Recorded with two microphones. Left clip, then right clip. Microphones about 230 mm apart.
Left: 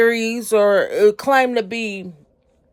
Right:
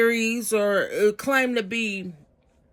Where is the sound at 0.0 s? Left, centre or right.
Centre.